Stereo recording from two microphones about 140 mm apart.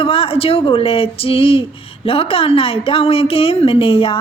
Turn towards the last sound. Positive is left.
turn(degrees=40)  # may be behind; listen again after turning